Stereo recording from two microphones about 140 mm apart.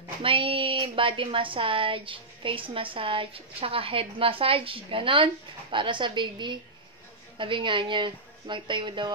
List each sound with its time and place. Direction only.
0.2 s a woman's voice: 40° right (ahead or behind)